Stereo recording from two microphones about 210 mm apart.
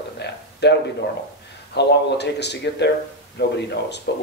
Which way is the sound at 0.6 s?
55° left (ahead or behind).